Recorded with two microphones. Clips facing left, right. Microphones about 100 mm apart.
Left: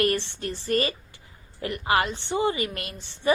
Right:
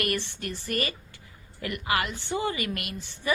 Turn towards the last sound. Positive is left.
turn(degrees=30)  # may be behind; listen again after turning